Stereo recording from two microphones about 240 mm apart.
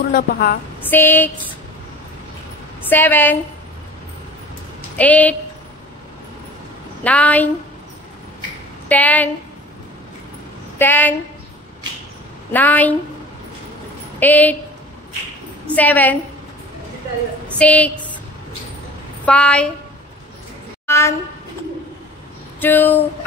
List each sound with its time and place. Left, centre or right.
0.1 s a woman's voice: left
0.8 s a woman's voice: centre
2.9 s a woman's voice: centre
4.9 s a woman's voice: centre
7.0 s a woman's voice: centre
8.8 s a woman's voice: centre
10.8 s a woman's voice: centre
12.5 s a woman's voice: centre
14.2 s a woman's voice: centre
15.7 s a woman's voice: centre
17.6 s a woman's voice: centre
19.2 s a woman's voice: centre
20.8 s a sound: centre
22.6 s a woman's voice: centre